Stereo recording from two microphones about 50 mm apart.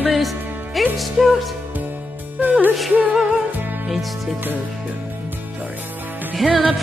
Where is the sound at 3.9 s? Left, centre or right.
Centre.